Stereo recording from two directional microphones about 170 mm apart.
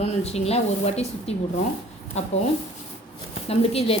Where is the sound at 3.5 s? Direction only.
35° left (ahead or behind).